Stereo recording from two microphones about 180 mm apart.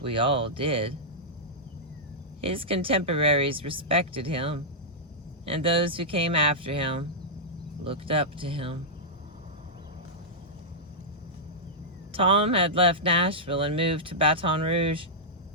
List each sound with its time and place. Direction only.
0.0 s speech: 30° right (ahead or behind)
2.4 s speech: 30° right (ahead or behind)
12.1 s speech: 30° right (ahead or behind)